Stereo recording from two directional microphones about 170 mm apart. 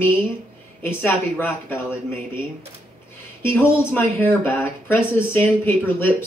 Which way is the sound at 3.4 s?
15° left (ahead or behind).